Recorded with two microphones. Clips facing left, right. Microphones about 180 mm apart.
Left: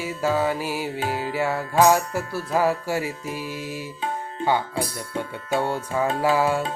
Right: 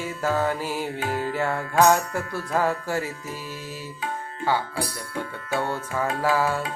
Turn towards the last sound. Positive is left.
turn(degrees=10)  # may be behind; listen again after turning